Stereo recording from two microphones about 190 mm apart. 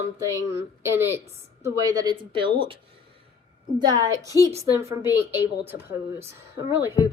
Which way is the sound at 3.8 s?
20° right (ahead or behind).